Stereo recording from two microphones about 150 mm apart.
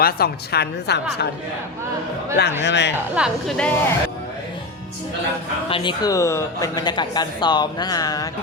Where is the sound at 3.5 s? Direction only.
10° left (ahead or behind).